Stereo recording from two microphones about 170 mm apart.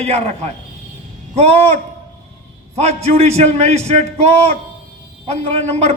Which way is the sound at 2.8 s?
40° right (ahead or behind).